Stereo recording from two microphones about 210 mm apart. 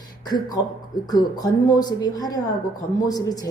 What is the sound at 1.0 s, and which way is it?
A woman's voice, 20° left (ahead or behind).